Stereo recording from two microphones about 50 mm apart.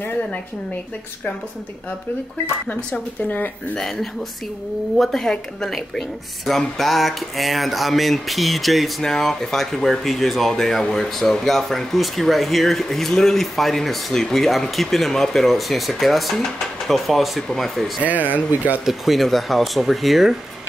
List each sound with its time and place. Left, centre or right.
2.7 s speech: left
3.7 s speech: centre
18.0 s speech: right
18.9 s speech: centre